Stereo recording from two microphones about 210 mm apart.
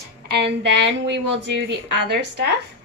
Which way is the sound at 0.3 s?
55° right (ahead or behind).